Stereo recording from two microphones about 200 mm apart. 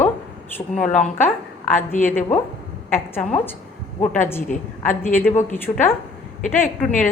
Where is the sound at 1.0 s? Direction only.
10° left (ahead or behind).